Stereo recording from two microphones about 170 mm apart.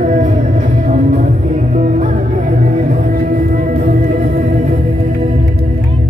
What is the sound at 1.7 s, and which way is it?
Music, 45° right (ahead or behind).